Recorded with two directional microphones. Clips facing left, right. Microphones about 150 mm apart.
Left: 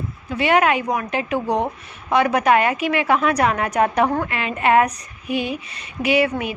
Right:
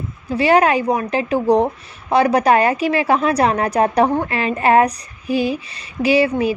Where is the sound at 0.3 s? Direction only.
35° right (ahead or behind).